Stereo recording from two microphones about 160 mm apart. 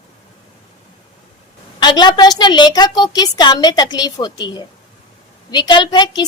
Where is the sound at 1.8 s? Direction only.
25° left (ahead or behind).